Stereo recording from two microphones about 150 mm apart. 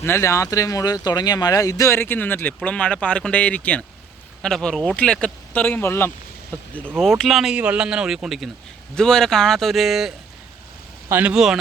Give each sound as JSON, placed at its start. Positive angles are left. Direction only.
{"t": 0.0, "sound": "speech", "side_deg": 15}